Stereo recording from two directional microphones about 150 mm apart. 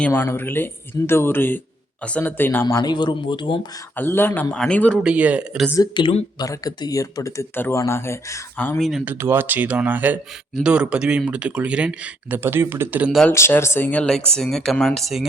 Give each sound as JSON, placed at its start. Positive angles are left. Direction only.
{"t": 0.0, "sound": "speech", "side_deg": 15}
{"t": 3.9, "sound": "speech", "side_deg": 15}
{"t": 5.0, "sound": "a man's voice", "side_deg": -10}
{"t": 5.7, "sound": "speech", "side_deg": 30}
{"t": 6.4, "sound": "speech", "side_deg": 25}
{"t": 8.8, "sound": "speech", "side_deg": -5}
{"t": 9.1, "sound": "a man's voice", "side_deg": -15}
{"t": 13.1, "sound": "speech", "side_deg": 0}
{"t": 13.3, "sound": "speech", "side_deg": 15}